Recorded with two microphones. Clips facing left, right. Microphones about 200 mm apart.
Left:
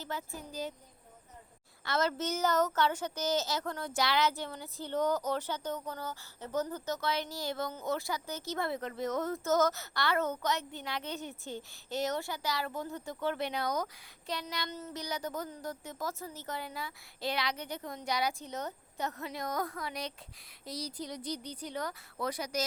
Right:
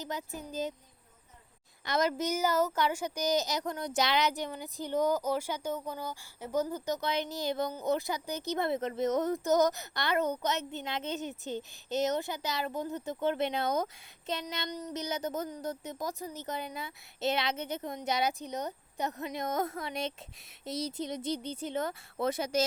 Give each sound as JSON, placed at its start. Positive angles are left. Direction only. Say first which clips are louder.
{"t": 0.0, "sound": "speech", "louder": "right 2 dB", "side_deg": -20}
{"t": 1.8, "sound": "a child's voice", "louder": "right 2 dB", "side_deg": -15}